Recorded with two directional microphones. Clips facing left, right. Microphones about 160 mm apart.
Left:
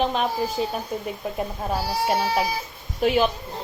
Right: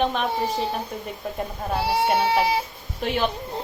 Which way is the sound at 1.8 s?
25° right (ahead or behind).